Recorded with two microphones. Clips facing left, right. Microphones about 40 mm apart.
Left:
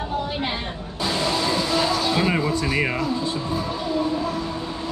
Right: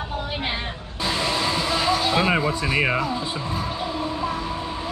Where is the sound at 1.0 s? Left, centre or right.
Centre.